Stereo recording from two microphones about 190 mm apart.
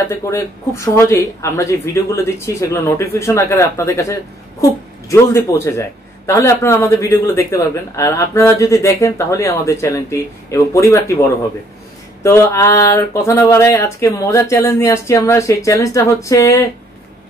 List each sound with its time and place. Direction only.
0.1 s speech: 15° left (ahead or behind)